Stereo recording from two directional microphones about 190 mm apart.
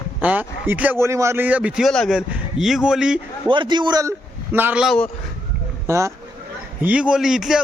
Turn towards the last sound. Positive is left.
turn(degrees=-5)  # may be behind; listen again after turning